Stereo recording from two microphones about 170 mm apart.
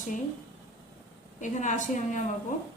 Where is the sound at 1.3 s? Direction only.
45° left (ahead or behind).